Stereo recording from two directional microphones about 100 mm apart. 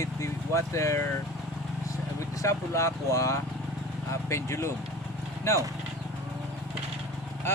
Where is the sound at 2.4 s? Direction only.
30° left (ahead or behind).